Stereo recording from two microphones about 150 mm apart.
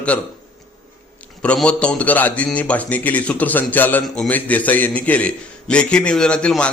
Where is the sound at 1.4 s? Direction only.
5° left (ahead or behind).